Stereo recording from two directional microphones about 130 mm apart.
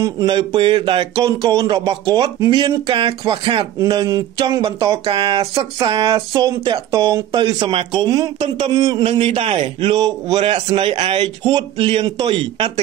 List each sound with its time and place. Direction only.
0.3 s speech: 40° right (ahead or behind)
1.2 s speech: 30° right (ahead or behind)
7.5 s speech: 40° right (ahead or behind)
8.4 s speech: 40° right (ahead or behind)
8.7 s speech: 30° right (ahead or behind)
9.0 s speech: 40° right (ahead or behind)
10.4 s a man's voice: 45° right (ahead or behind)